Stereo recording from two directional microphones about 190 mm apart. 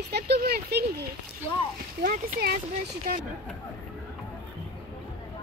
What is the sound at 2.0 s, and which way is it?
Speech, 50° right (ahead or behind).